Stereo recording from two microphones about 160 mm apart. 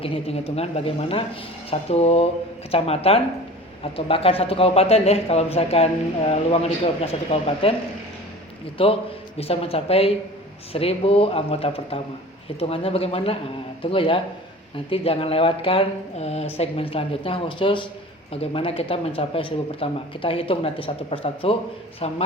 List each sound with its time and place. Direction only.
0.0 s speech: 35° left (ahead or behind)
8.8 s speech: 35° left (ahead or behind)